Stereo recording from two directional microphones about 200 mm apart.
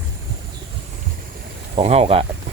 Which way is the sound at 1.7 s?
30° right (ahead or behind).